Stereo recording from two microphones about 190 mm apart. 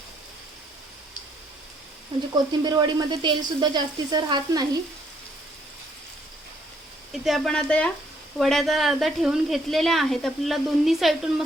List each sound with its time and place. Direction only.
2.5 s speech: 25° right (ahead or behind)
7.1 s speech: centre (ahead or behind)